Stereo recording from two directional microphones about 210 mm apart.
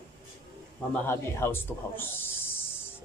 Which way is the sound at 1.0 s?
10° left (ahead or behind).